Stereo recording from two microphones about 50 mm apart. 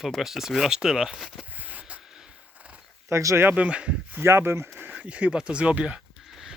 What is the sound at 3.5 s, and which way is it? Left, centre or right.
Speech, right.